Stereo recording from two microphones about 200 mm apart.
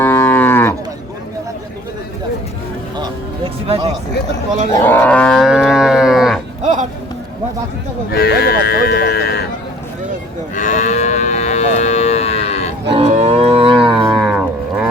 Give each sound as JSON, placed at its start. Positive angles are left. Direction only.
{"t": 0.0, "sound": "cattle", "side_deg": 10}
{"t": 3.0, "sound": "music", "side_deg": -30}
{"t": 4.7, "sound": "livestock", "side_deg": 10}
{"t": 6.6, "sound": "a sound", "side_deg": -35}
{"t": 8.1, "sound": "speech", "side_deg": 50}
{"t": 10.5, "sound": "moo", "side_deg": 35}
{"t": 12.9, "sound": "livestock", "side_deg": -30}